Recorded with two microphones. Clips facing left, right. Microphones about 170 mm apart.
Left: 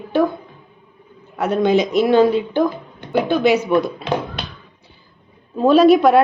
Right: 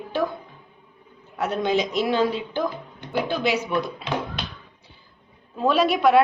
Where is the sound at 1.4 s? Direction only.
55° left (ahead or behind).